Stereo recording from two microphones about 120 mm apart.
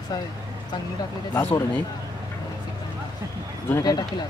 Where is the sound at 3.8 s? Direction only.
35° left (ahead or behind).